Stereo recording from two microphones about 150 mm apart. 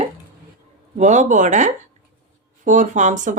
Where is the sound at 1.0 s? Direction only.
55° right (ahead or behind).